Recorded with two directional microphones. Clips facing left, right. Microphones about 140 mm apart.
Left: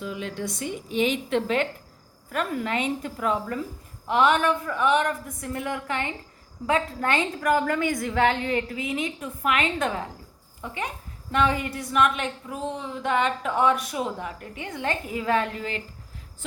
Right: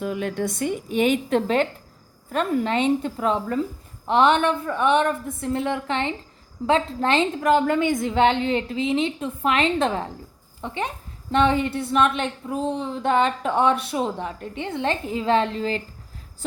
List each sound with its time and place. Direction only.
0.0 s a woman's voice: 55° right (ahead or behind); by 15.8 s 30° right (ahead or behind)